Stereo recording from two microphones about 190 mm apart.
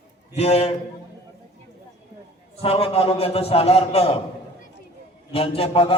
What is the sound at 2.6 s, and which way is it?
A man's voice, 30° left (ahead or behind).